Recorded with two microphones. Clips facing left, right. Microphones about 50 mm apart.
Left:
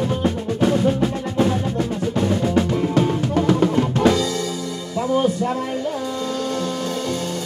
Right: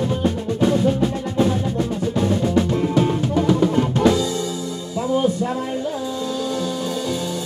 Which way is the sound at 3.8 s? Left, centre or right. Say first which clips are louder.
Even; left.